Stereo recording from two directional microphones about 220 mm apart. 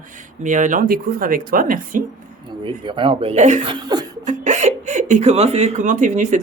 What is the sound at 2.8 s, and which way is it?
Speech, 20° right (ahead or behind).